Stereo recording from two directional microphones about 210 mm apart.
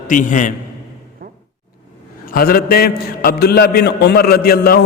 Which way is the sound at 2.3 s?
45° left (ahead or behind).